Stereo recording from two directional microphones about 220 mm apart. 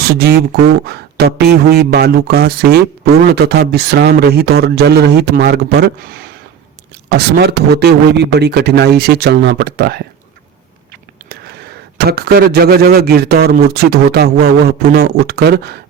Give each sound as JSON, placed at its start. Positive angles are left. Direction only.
{"t": 0.0, "sound": "speech", "side_deg": -45}
{"t": 11.9, "sound": "speech", "side_deg": -45}